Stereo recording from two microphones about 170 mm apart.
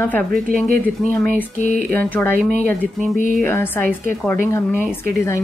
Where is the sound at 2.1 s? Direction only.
10° left (ahead or behind).